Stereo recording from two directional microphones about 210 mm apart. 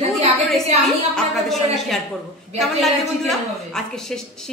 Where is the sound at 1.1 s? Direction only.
Centre (ahead or behind).